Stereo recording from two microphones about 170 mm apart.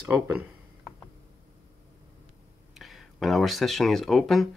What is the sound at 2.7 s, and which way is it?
Speech, centre (ahead or behind).